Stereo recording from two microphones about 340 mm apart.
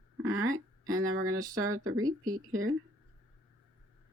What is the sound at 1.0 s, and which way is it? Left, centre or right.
Speech, right.